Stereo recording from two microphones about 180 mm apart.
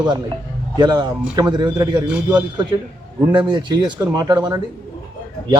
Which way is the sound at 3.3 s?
25° right (ahead or behind).